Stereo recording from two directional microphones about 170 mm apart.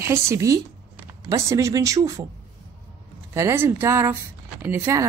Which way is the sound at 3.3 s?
15° right (ahead or behind).